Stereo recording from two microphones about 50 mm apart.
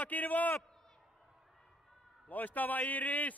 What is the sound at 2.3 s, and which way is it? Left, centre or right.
A man's voice, left.